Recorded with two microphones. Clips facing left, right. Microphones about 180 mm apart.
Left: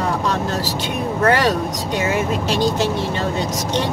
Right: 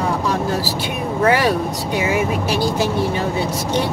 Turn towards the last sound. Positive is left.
turn(degrees=-10)  # may be behind; listen again after turning